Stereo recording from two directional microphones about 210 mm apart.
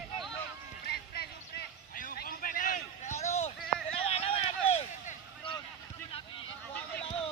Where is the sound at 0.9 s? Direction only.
50° left (ahead or behind); by 5.5 s 25° left (ahead or behind).